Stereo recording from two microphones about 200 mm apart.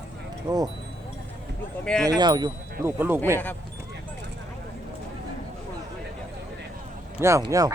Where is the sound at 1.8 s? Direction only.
5° left (ahead or behind).